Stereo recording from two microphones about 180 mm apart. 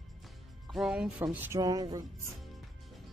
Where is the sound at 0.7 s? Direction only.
Centre (ahead or behind); by 2.0 s 20° right (ahead or behind).